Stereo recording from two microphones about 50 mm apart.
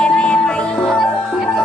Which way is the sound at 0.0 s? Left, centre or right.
Centre.